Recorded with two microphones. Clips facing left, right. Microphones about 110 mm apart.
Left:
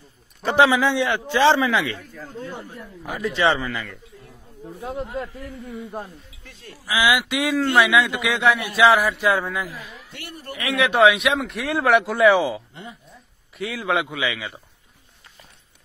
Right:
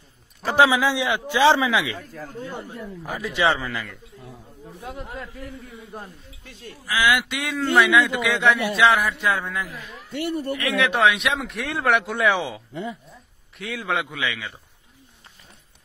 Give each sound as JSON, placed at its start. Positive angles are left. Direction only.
{"t": 0.4, "sound": "a man's voice", "side_deg": 0}
{"t": 3.4, "sound": "a man's voice", "side_deg": 0}
{"t": 4.8, "sound": "a man's voice", "side_deg": 25}
{"t": 6.9, "sound": "speech", "side_deg": 15}
{"t": 7.2, "sound": "a man's voice", "side_deg": 0}
{"t": 13.1, "sound": "a sound", "side_deg": 0}
{"t": 14.1, "sound": "a man's voice", "side_deg": 5}